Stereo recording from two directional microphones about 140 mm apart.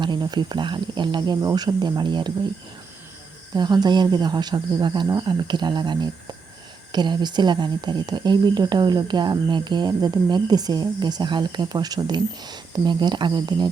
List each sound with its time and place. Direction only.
0.0 s speech: 30° right (ahead or behind)
3.5 s speech: 30° right (ahead or behind)